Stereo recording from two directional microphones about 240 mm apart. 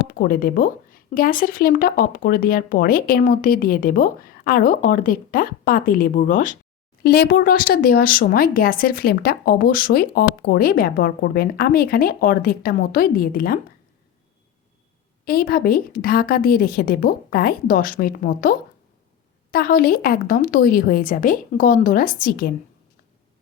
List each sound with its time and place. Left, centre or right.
0.1 s speech: left
15.2 s speech: left